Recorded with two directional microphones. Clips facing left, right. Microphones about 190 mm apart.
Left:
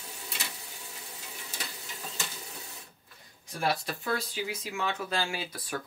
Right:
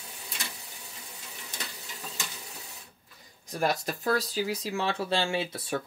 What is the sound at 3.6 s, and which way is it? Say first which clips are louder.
Speech: right 3 dB; 40° right (ahead or behind).